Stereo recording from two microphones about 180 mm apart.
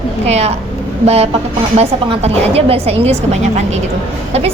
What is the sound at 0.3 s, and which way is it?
A woman's voice, 35° right (ahead or behind).